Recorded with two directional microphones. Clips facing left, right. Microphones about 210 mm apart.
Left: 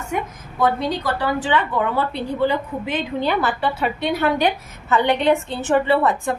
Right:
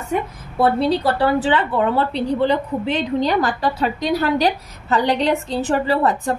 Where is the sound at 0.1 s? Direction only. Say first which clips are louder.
Right 4 dB; 35° right (ahead or behind).